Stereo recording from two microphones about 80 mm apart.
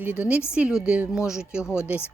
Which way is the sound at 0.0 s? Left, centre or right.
Centre.